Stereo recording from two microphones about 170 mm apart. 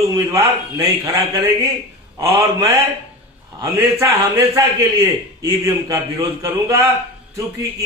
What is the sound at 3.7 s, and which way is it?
A man's voice, 15° right (ahead or behind).